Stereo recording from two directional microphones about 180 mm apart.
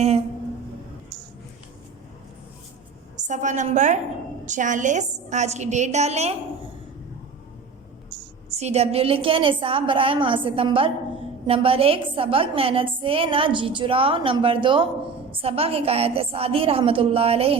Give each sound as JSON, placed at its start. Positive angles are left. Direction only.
{"t": 3.2, "sound": "a woman's voice", "side_deg": -45}
{"t": 8.4, "sound": "a woman's voice", "side_deg": -35}